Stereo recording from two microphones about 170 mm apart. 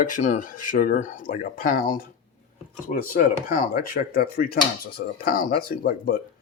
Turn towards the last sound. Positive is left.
turn(degrees=55)  # may be behind; listen again after turning